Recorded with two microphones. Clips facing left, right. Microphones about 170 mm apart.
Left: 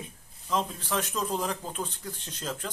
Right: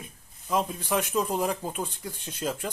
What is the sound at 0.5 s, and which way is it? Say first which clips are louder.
Speech: right 3 dB; 10° right (ahead or behind).